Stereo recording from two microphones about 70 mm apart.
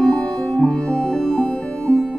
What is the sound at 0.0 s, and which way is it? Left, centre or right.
Music, centre.